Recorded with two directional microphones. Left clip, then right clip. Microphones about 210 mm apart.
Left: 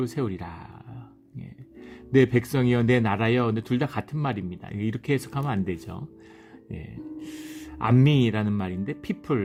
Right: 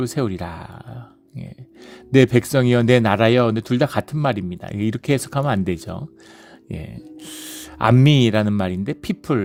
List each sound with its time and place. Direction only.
0.0 s speech: 35° right (ahead or behind)
2.1 s speech: 35° right (ahead or behind)